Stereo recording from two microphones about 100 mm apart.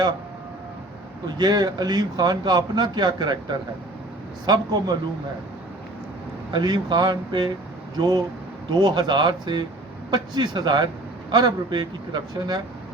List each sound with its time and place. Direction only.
1.4 s a man's voice: 40° right (ahead or behind)
4.4 s a man's voice: 40° right (ahead or behind)
6.5 s a man's voice: 45° right (ahead or behind)
7.9 s a man's voice: 40° right (ahead or behind)